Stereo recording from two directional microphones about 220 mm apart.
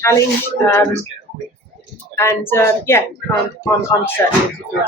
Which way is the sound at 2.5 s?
10° left (ahead or behind).